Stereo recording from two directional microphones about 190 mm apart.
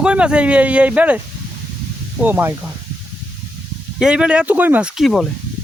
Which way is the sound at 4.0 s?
5° right (ahead or behind).